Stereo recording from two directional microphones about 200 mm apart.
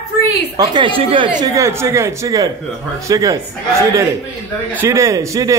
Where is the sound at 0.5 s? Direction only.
20° right (ahead or behind).